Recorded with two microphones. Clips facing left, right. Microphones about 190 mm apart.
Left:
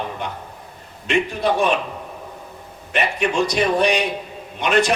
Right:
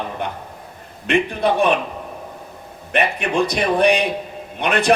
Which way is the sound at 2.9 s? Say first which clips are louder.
Right 1 dB; 55° right (ahead or behind).